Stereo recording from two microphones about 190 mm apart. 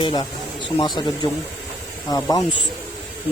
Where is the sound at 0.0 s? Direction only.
25° left (ahead or behind).